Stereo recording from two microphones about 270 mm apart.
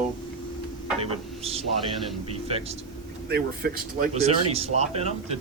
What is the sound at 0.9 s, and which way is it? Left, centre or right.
Speech, right.